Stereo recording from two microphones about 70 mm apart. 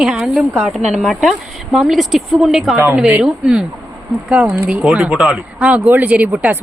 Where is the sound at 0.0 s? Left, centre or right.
Centre.